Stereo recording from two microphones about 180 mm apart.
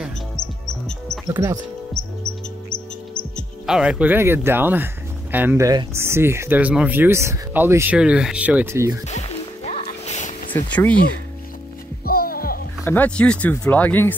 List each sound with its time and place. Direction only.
0.0 s music: centre (ahead or behind)
1.3 s speech: 20° right (ahead or behind)
3.3 s speech: 5° right (ahead or behind)
9.0 s music: 40° left (ahead or behind)
10.5 s speech: 10° left (ahead or behind)
12.1 s music: 55° left (ahead or behind)
12.8 s speech: 10° left (ahead or behind)